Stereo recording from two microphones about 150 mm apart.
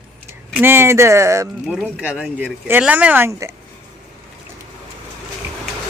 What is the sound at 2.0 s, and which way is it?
A woman's voice, 5° right (ahead or behind).